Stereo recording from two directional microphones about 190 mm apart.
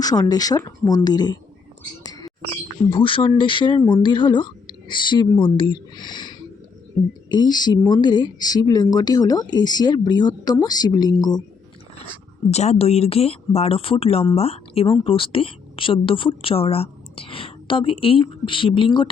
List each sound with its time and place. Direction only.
0.0 s speech: 20° left (ahead or behind)
2.9 s speech: 25° left (ahead or behind)
12.5 s a woman's voice: 35° left (ahead or behind)